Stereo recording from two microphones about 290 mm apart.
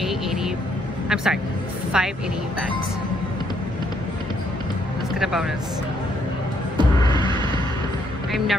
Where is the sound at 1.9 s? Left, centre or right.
Centre.